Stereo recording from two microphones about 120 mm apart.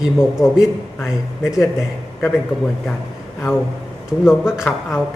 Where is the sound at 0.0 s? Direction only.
5° right (ahead or behind).